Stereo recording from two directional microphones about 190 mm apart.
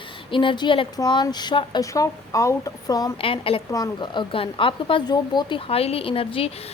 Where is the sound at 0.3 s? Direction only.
25° left (ahead or behind).